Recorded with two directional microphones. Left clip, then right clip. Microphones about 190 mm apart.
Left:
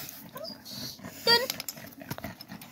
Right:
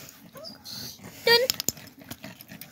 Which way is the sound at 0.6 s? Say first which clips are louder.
Right 2 dB; 30° right (ahead or behind).